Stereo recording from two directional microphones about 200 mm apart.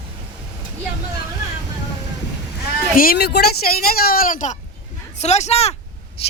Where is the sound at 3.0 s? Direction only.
50° left (ahead or behind); by 5.7 s 30° left (ahead or behind).